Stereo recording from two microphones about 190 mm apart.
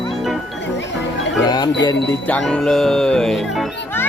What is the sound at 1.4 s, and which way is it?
Speech, 20° left (ahead or behind).